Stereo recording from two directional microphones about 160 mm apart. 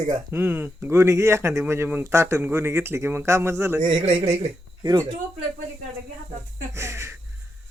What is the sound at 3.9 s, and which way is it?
Speech, 35° right (ahead or behind).